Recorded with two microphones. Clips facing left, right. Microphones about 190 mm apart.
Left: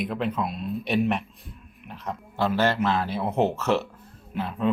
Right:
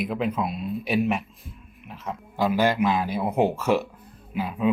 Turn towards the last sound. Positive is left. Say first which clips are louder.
# right 1 dB
turn(degrees=-10)  # may be behind; listen again after turning